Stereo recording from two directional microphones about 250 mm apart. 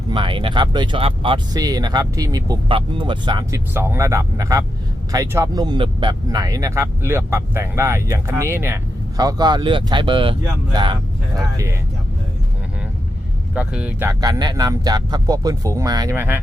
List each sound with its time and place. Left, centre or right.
0.1 s speech: centre
13.5 s speech: centre